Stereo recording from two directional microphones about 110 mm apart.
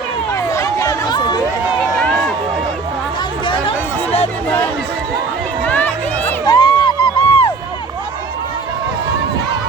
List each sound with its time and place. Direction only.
0.3 s chatter: 25° left (ahead or behind)
2.0 s run: 5° left (ahead or behind)
3.4 s a sound: 50° left (ahead or behind)
4.4 s chatter: 15° left (ahead or behind)
5.6 s run: 15° left (ahead or behind)
6.4 s a sound: 40° left (ahead or behind)